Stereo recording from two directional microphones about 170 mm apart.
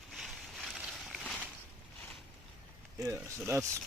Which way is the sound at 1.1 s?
Centre (ahead or behind).